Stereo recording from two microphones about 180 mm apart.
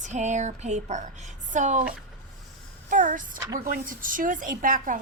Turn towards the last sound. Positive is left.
turn(degrees=-50)  # may be behind; listen again after turning